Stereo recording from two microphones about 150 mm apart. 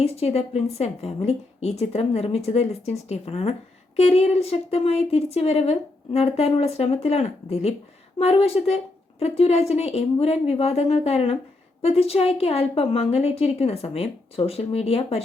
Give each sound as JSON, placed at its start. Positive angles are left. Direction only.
{"t": 0.0, "sound": "a woman's voice", "side_deg": 45}